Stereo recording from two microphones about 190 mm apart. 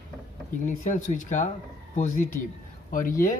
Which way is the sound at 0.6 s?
40° left (ahead or behind).